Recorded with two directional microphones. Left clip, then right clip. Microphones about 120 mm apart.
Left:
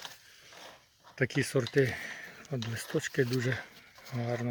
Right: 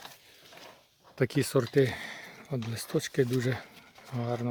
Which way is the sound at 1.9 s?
25° right (ahead or behind).